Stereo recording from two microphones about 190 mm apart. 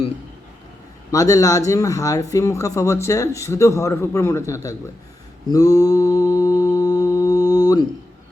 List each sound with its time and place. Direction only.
1.1 s speech: 15° left (ahead or behind)
5.5 s mantra: 20° left (ahead or behind)